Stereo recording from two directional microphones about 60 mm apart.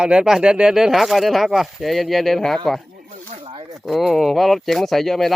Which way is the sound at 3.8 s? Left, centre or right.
Centre.